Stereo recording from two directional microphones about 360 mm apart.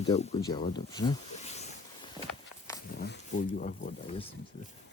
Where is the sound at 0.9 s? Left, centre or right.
Centre.